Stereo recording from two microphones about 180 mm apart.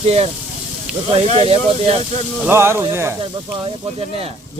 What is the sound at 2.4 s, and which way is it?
Speech, 15° right (ahead or behind).